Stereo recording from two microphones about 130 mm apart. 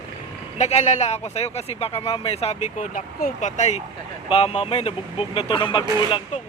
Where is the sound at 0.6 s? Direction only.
60° left (ahead or behind).